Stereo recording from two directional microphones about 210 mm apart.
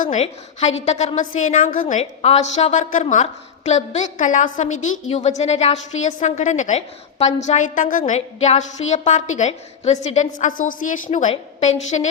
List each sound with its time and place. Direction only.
0.0 s a woman's voice: 35° left (ahead or behind)